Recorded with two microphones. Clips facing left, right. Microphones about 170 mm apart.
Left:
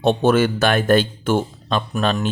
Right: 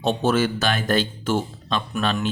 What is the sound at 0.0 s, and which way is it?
Speech, 60° left (ahead or behind).